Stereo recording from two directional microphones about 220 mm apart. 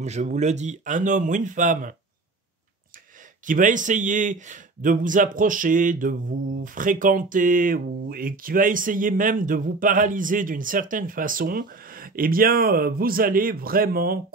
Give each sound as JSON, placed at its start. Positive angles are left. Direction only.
{"t": 0.0, "sound": "speech", "side_deg": -30}
{"t": 3.4, "sound": "speech", "side_deg": -35}